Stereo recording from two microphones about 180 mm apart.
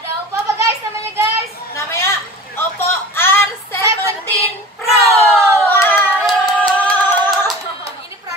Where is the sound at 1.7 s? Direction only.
15° left (ahead or behind).